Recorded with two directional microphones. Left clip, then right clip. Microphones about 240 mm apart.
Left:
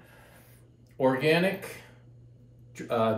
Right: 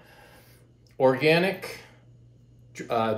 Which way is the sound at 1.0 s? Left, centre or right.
Right.